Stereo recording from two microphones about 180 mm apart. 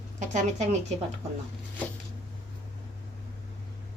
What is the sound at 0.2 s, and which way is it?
Speech, 40° right (ahead or behind).